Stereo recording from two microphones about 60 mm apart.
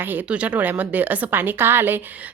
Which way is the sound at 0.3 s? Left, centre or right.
Right.